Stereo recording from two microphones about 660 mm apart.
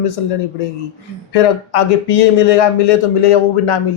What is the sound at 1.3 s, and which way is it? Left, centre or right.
Speech, left.